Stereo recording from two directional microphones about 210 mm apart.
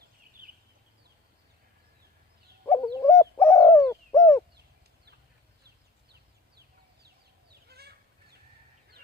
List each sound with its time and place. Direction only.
2.6 s bird: 15° left (ahead or behind)
7.7 s fowl: 50° right (ahead or behind)